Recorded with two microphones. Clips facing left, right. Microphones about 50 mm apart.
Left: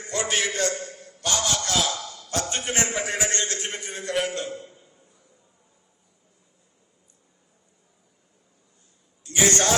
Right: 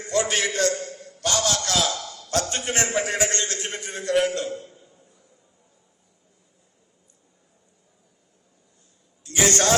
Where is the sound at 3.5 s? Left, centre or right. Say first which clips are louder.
Right 1 dB; right.